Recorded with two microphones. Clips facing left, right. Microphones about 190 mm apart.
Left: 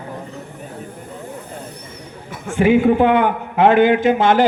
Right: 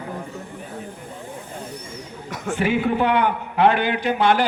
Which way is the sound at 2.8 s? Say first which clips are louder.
Left 6 dB; 50° left (ahead or behind).